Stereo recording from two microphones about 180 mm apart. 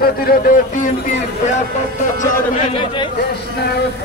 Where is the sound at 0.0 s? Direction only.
55° left (ahead or behind).